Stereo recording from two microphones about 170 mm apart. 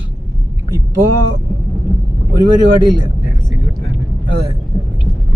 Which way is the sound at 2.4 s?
25° right (ahead or behind).